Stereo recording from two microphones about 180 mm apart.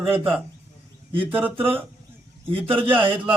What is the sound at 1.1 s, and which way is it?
Speech, 30° right (ahead or behind).